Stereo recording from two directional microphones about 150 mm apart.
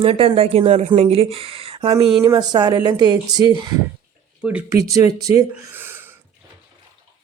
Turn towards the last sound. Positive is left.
turn(degrees=-15)  # may be behind; listen again after turning